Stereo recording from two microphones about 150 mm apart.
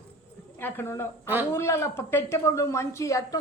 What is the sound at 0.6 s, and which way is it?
A woman's voice, 15° left (ahead or behind).